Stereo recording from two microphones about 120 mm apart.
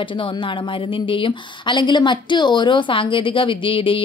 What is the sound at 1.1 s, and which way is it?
Speech, 45° left (ahead or behind).